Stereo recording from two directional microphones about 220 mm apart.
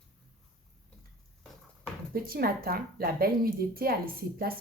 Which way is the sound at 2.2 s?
40° right (ahead or behind).